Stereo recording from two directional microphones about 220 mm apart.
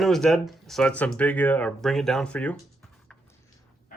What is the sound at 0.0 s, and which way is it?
Speech, centre (ahead or behind).